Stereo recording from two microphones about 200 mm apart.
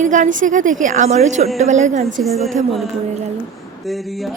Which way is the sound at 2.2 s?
Centre (ahead or behind).